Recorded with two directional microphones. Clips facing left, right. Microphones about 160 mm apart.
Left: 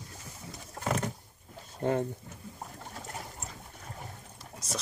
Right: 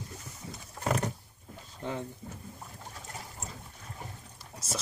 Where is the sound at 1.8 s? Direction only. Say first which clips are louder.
Left 7 dB; 50° left (ahead or behind).